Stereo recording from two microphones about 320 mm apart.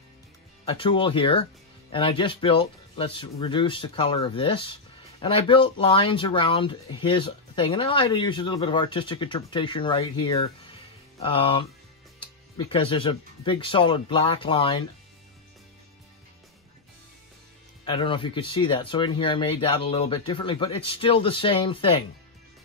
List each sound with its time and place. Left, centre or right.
0.7 s speech: centre
17.8 s speech: centre